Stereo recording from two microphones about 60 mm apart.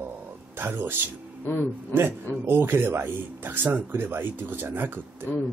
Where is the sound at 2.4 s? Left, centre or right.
Right.